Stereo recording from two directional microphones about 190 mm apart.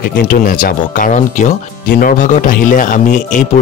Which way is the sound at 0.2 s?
50° left (ahead or behind).